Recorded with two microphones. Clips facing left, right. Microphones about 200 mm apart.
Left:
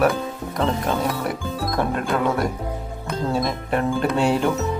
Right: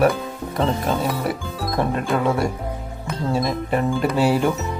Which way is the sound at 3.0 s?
Centre (ahead or behind).